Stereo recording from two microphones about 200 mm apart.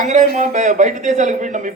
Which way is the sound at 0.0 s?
40° right (ahead or behind).